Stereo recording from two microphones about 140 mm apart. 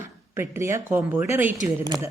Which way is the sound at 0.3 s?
20° right (ahead or behind).